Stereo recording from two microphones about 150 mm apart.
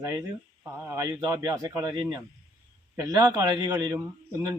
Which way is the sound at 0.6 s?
20° right (ahead or behind).